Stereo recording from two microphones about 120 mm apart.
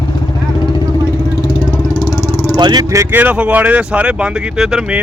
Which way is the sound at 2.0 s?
30° left (ahead or behind).